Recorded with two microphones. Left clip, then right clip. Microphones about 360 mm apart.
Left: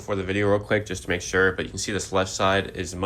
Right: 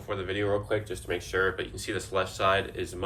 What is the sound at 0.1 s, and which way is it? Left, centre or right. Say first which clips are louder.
Speech: left 6 dB; centre.